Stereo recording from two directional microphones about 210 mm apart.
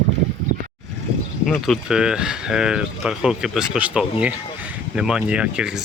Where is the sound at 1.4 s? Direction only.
Centre (ahead or behind).